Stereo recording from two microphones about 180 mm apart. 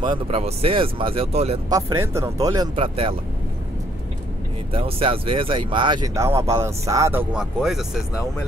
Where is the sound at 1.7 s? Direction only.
15° right (ahead or behind).